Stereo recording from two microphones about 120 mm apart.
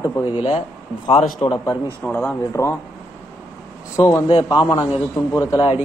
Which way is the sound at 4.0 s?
25° left (ahead or behind).